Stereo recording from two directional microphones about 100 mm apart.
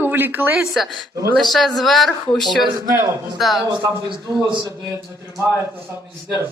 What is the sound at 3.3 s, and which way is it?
Speech, centre (ahead or behind).